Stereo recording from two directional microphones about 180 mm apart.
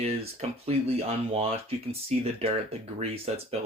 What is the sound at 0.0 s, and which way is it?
Speech, 35° right (ahead or behind).